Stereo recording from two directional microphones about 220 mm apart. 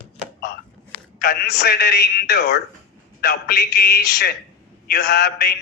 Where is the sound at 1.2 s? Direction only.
45° left (ahead or behind).